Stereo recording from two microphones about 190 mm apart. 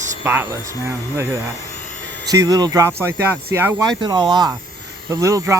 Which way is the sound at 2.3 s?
20° right (ahead or behind).